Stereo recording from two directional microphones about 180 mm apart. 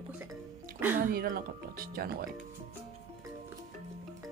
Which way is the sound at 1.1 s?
55° right (ahead or behind).